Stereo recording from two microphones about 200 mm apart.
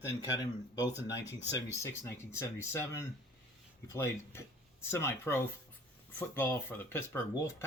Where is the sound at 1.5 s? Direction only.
15° left (ahead or behind).